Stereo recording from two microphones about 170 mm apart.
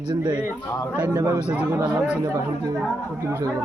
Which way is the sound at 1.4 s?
5° right (ahead or behind).